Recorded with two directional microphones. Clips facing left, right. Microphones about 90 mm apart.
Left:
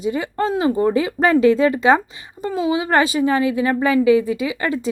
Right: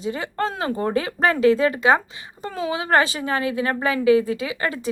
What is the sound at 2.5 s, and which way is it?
Speech, 15° left (ahead or behind).